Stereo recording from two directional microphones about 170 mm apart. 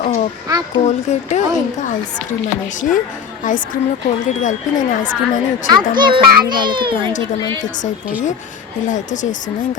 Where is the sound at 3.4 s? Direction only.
50° left (ahead or behind).